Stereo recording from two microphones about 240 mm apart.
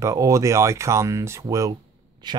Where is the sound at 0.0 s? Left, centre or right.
Centre.